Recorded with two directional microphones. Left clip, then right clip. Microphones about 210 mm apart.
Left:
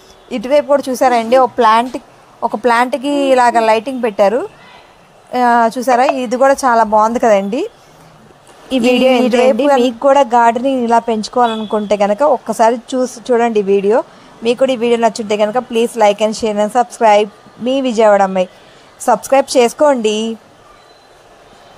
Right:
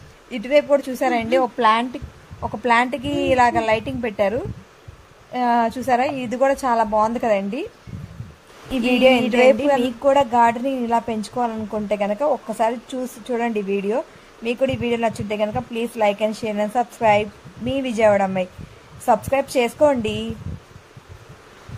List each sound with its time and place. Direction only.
0.3 s a woman's voice: 15° left (ahead or behind)
8.6 s speech: 25° left (ahead or behind)